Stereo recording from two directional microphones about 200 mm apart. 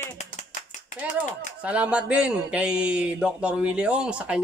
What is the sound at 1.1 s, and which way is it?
A man's voice, 5° right (ahead or behind).